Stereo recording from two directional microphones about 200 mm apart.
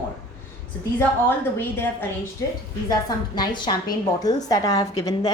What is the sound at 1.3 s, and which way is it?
A woman's voice, 10° left (ahead or behind).